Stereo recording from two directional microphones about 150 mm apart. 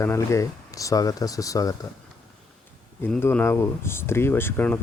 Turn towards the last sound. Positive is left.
turn(degrees=15)  # may be behind; listen again after turning